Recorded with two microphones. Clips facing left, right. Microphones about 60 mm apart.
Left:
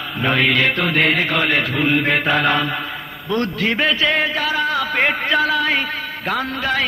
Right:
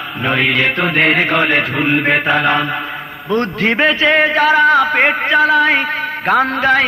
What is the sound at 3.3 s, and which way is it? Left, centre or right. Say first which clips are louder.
A man's voice: right 4 dB; right.